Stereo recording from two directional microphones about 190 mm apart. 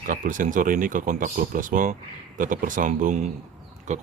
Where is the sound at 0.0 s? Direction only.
45° right (ahead or behind).